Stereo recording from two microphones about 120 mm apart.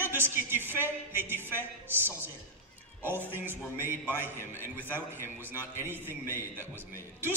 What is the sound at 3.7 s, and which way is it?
Speech, 15° right (ahead or behind).